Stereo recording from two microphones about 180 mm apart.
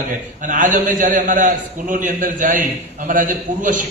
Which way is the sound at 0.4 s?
45° right (ahead or behind).